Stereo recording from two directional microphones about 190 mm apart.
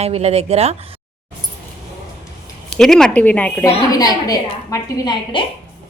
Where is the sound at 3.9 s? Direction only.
20° left (ahead or behind).